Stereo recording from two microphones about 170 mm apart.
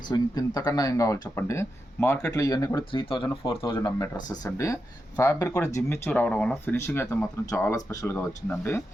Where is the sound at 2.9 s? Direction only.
30° left (ahead or behind).